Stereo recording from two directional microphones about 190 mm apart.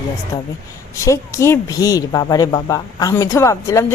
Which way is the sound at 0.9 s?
15° left (ahead or behind).